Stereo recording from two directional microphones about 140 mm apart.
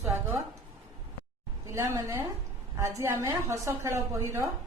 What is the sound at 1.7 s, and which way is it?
A woman's voice, 20° right (ahead or behind).